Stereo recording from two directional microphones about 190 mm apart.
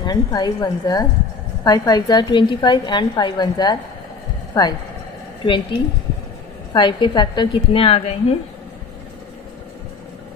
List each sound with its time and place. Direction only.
0.0 s a woman's voice: 20° left (ahead or behind)